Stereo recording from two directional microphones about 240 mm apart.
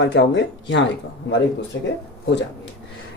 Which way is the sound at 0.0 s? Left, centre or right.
Left.